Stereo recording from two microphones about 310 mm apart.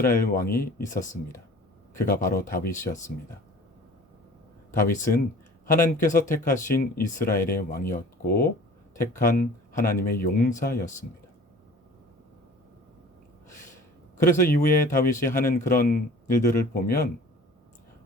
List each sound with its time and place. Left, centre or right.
0.0 s speech: left
2.0 s speech: left
4.7 s speech: left
14.2 s speech: left